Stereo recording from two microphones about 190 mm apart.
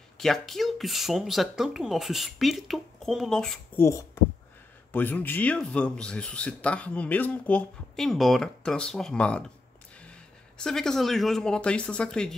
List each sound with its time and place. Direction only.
0.2 s speech: centre (ahead or behind)
3.8 s speech: 15° left (ahead or behind)